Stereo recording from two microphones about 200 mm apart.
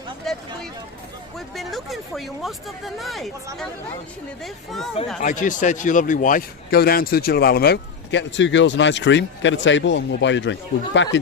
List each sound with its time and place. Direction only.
0.3 s a sound: centre (ahead or behind)
1.4 s speech: centre (ahead or behind)
4.4 s speech: centre (ahead or behind)
5.2 s speech: 40° left (ahead or behind); by 11.2 s 65° left (ahead or behind)